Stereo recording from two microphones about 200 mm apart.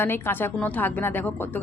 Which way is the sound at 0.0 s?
10° left (ahead or behind).